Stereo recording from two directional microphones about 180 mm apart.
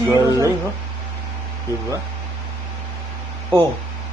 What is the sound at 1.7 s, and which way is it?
Speech, 15° right (ahead or behind).